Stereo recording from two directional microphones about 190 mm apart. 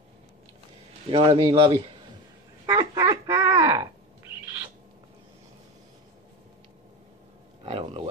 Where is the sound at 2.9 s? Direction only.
15° right (ahead or behind).